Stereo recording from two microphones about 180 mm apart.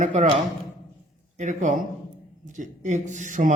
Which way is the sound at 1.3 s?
45° right (ahead or behind).